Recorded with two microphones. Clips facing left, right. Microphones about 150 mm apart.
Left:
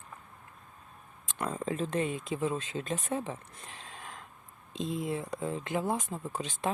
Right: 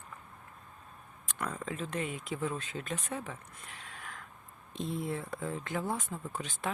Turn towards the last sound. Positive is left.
turn(degrees=20)  # may be behind; listen again after turning